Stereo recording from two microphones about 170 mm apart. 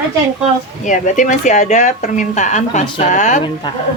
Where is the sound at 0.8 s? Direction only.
50° left (ahead or behind).